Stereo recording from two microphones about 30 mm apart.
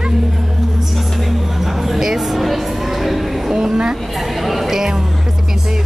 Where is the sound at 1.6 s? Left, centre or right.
Centre.